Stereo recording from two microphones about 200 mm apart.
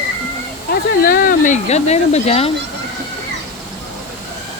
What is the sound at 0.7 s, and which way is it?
Speech, 45° left (ahead or behind).